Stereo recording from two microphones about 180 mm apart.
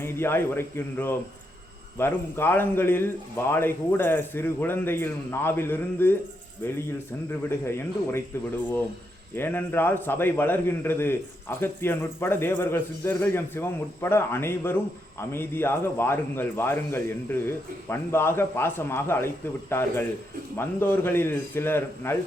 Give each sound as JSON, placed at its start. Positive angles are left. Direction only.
{"t": 0.0, "sound": "a man's voice", "side_deg": 15}
{"t": 7.3, "sound": "a man's voice", "side_deg": 15}
{"t": 9.3, "sound": "a man's voice", "side_deg": 10}
{"t": 20.6, "sound": "a man's voice", "side_deg": 10}